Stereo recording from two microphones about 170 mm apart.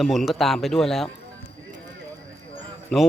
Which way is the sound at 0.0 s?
Centre (ahead or behind).